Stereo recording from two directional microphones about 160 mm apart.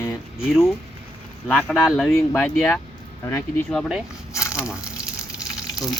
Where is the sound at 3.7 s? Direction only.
Centre (ahead or behind).